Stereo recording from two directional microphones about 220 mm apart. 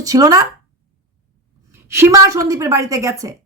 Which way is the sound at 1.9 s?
15° right (ahead or behind).